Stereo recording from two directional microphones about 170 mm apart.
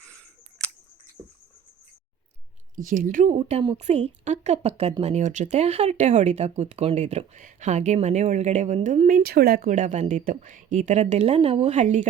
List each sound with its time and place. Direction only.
0.6 s camera: 5° left (ahead or behind)
2.7 s speech: 50° right (ahead or behind)
3.3 s a woman's voice: 30° right (ahead or behind)